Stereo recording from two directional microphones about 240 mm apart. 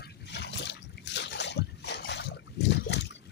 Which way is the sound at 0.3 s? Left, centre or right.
Left.